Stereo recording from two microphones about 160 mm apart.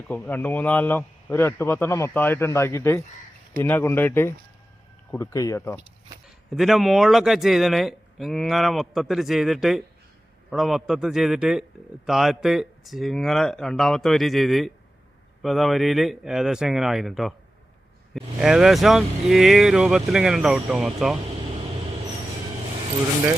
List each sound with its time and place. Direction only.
0.1 s speech: 10° left (ahead or behind)
6.5 s speech: centre (ahead or behind)